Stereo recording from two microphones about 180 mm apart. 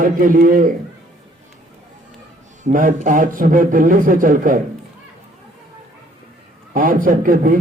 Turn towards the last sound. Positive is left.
turn(degrees=-50)  # may be behind; listen again after turning